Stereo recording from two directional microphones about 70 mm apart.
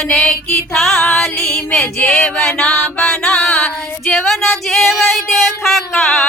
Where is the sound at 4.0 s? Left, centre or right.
Centre.